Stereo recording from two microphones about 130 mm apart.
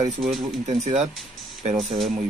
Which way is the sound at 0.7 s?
60° right (ahead or behind).